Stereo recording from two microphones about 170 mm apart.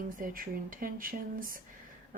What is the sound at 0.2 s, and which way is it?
A woman's voice, 55° right (ahead or behind).